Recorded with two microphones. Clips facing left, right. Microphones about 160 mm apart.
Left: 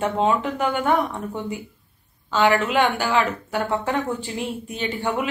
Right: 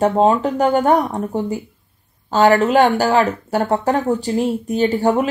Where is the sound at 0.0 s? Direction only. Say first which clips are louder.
Right 7 dB; 40° right (ahead or behind).